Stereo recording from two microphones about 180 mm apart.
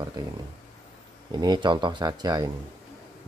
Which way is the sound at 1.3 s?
25° right (ahead or behind).